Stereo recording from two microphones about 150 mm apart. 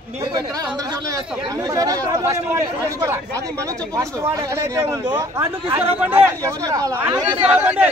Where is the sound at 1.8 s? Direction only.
20° right (ahead or behind).